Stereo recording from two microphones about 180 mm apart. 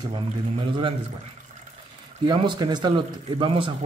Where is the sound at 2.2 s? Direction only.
25° right (ahead or behind).